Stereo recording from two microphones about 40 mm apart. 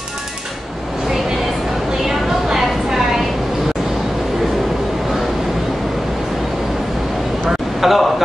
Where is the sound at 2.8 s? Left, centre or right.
Centre.